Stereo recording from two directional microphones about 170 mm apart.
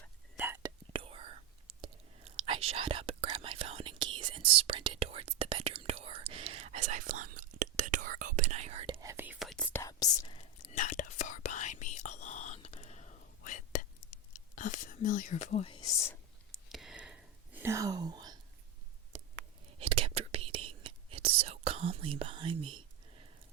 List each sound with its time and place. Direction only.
0.3 s whispering: 15° right (ahead or behind)
0.9 s whispering: 30° right (ahead or behind)
9.0 s whispering: 15° right (ahead or behind)
9.5 s whispering: 5° left (ahead or behind)
10.2 s whispering: 35° left (ahead or behind)
10.8 s whispering: 50° left (ahead or behind)
16.5 s whispering: centre (ahead or behind); by 18.3 s 25° right (ahead or behind)
19.8 s whispering: 35° right (ahead or behind)